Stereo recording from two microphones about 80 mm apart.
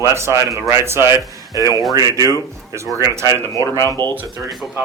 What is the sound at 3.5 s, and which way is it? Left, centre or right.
Speech, left.